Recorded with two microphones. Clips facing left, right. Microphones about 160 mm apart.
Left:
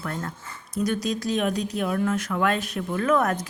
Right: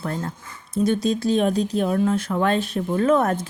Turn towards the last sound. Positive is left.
turn(degrees=-30)  # may be behind; listen again after turning